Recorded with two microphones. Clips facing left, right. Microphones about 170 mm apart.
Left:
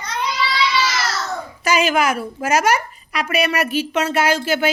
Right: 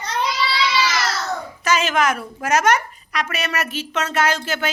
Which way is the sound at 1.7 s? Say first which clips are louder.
Left 2 dB; 10° left (ahead or behind).